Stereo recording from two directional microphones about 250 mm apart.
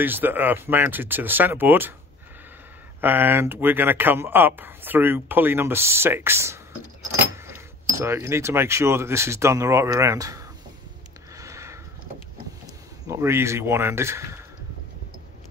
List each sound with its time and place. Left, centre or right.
0.0 s speech: centre
3.0 s speech: centre
8.0 s speech: centre
11.3 s a sound: centre
13.0 s speech: centre